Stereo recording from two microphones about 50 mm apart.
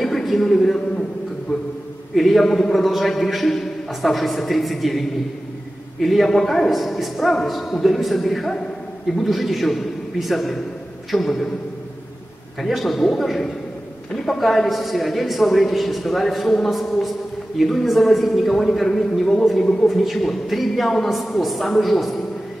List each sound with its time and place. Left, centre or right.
0.0 s a sound: centre
2.1 s a man's voice: centre
12.6 s a man's voice: centre
19.6 s a man's voice: centre
19.9 s a man's voice: centre